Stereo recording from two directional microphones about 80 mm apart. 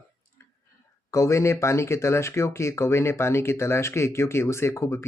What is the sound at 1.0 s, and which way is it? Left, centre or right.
Speech, left.